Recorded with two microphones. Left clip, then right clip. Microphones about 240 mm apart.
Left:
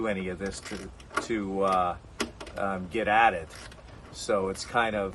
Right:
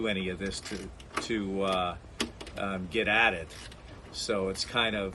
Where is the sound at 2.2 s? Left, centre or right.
Centre.